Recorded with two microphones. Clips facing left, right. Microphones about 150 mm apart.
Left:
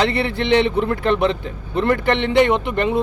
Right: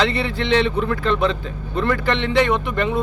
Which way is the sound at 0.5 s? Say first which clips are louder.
Left 2 dB; 20° left (ahead or behind).